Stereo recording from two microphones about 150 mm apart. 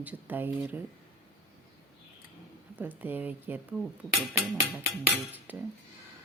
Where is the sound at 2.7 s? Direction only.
10° right (ahead or behind).